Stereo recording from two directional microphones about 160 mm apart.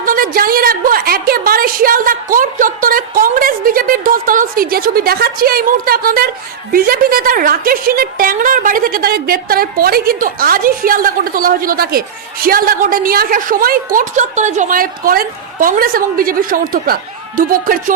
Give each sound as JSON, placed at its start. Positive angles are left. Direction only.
{"t": 0.0, "sound": "a woman's voice", "side_deg": -60}